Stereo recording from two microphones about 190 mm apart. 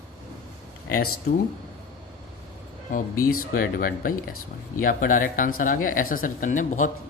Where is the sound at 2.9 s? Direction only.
45° left (ahead or behind).